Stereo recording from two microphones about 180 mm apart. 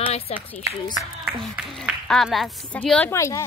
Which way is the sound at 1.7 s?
Centre (ahead or behind).